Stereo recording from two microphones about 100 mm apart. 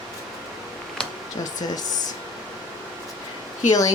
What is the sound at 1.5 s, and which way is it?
Speech, 40° left (ahead or behind).